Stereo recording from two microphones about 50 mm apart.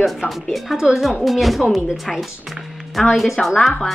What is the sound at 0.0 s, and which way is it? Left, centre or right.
A woman's voice, centre.